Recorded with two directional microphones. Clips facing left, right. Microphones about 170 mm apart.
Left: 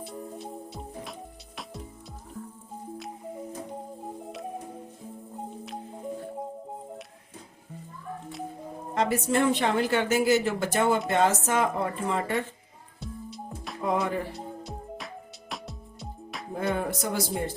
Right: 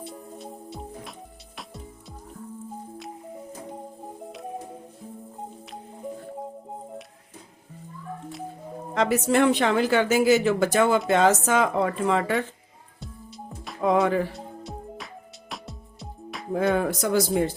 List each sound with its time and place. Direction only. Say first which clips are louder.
0.0 s music: left 1 dB; centre (ahead or behind)
9.0 s a woman's voice: right 4 dB; 85° right
13.8 s music: right 6 dB; 90° right
14.3 s music: even; centre (ahead or behind)
16.6 s a woman's voice: right 6 dB; 90° right